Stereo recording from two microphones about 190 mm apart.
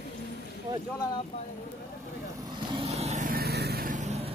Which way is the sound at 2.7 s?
35° right (ahead or behind).